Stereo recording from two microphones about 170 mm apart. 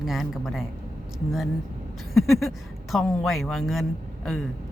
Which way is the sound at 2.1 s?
Centre (ahead or behind).